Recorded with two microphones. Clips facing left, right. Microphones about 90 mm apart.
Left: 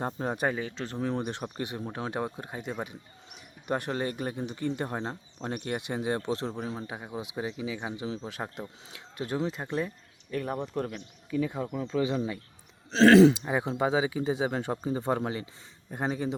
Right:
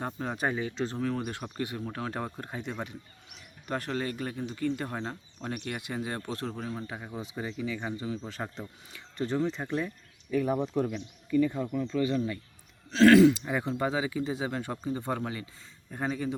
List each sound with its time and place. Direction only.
0.0 s speech: 30° left (ahead or behind)
0.9 s speech: 20° left (ahead or behind)
3.7 s speech: 20° left (ahead or behind); by 11.0 s 5° right (ahead or behind)
11.3 s speech: 10° left (ahead or behind); by 16.3 s 30° left (ahead or behind)